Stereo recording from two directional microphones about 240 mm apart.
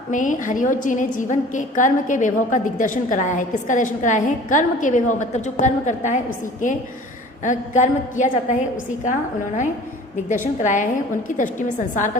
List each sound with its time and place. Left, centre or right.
0.1 s a woman's voice: left
10.2 s a woman's voice: left